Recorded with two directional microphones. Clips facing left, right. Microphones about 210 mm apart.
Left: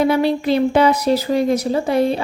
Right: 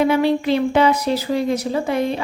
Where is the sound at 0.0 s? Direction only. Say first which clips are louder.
Even; 35° left (ahead or behind).